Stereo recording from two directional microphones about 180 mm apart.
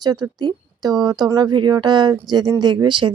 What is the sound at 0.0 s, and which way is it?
Speech, 20° right (ahead or behind).